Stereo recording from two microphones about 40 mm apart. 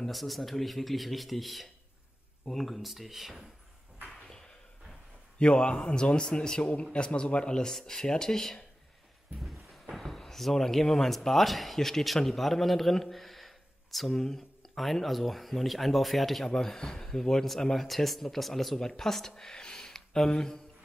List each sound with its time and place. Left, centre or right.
0.1 s speech: centre
4.1 s a sound: centre
5.4 s a man's voice: left
9.4 s a sound: centre
10.0 s a man's voice: centre
16.5 s speech: centre